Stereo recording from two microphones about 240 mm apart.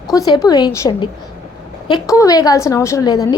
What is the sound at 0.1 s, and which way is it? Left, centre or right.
A woman's voice, centre.